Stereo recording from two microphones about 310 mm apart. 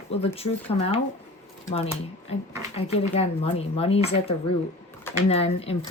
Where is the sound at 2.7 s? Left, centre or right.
Centre.